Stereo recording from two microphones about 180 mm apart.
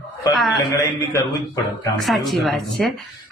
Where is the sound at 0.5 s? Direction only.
20° left (ahead or behind).